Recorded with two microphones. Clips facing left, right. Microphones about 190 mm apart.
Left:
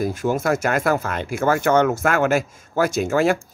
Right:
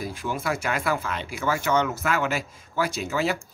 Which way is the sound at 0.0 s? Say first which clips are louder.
Left 8 dB; 45° left (ahead or behind).